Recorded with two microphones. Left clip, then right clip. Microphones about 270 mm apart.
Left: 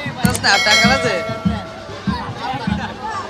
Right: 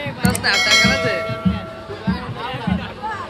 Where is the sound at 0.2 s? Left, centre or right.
Centre.